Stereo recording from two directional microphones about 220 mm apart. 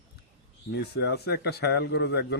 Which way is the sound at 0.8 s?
50° left (ahead or behind).